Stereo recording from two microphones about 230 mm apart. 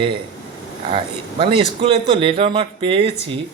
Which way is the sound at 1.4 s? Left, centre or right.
Right.